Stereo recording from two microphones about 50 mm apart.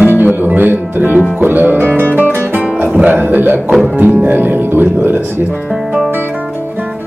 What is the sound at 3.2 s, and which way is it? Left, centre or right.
Speech, right.